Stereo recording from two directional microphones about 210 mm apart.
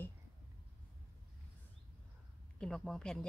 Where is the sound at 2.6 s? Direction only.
Centre (ahead or behind).